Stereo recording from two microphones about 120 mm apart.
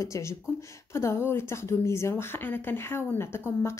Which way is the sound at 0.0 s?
25° left (ahead or behind).